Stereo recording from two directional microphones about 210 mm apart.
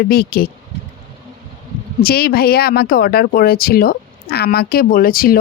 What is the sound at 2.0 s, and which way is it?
Speech, 45° left (ahead or behind).